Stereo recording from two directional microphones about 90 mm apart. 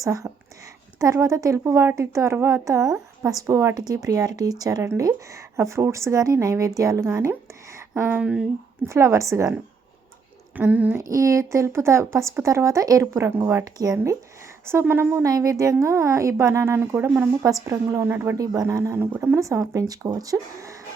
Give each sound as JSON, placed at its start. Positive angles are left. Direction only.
{"t": 0.0, "sound": "speech", "side_deg": -40}
{"t": 3.8, "sound": "speech", "side_deg": -45}
{"t": 4.8, "sound": "a woman's voice", "side_deg": -35}
{"t": 8.2, "sound": "speech", "side_deg": -15}
{"t": 8.9, "sound": "speech", "side_deg": -35}
{"t": 10.6, "sound": "a woman's voice", "side_deg": -20}
{"t": 10.9, "sound": "a woman's voice", "side_deg": -35}
{"t": 15.3, "sound": "speech", "side_deg": -40}
{"t": 17.4, "sound": "speech", "side_deg": -40}
{"t": 18.3, "sound": "speech", "side_deg": -40}
{"t": 18.9, "sound": "a woman's voice", "side_deg": -20}
{"t": 19.4, "sound": "speech", "side_deg": -35}